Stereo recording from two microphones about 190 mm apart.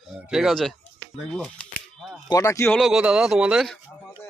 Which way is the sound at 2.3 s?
20° left (ahead or behind).